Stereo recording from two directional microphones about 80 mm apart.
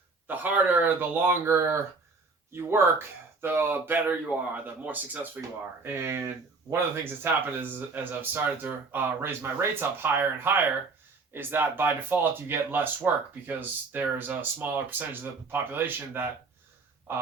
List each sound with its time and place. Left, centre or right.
0.3 s speech: right
5.4 s speech: right